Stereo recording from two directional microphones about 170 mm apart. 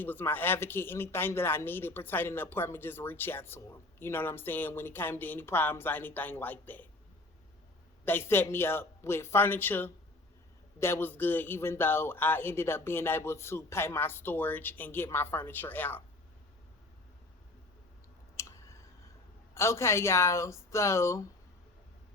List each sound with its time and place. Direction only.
0.0 s speech: 10° left (ahead or behind)
8.0 s speech: 15° left (ahead or behind)
18.3 s a sound: 15° left (ahead or behind)
19.5 s speech: 15° left (ahead or behind)